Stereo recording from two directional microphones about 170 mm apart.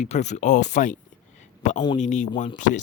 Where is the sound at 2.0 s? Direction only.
45° left (ahead or behind).